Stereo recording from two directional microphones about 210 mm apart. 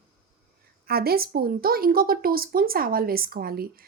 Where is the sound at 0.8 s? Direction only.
45° right (ahead or behind).